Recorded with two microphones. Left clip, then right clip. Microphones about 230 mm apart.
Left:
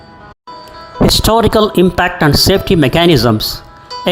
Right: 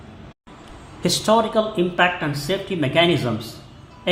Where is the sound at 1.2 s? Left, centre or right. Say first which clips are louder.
Left 5 dB; left.